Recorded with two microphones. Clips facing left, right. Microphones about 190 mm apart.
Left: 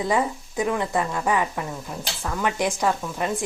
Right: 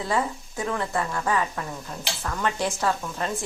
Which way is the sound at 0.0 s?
15° left (ahead or behind).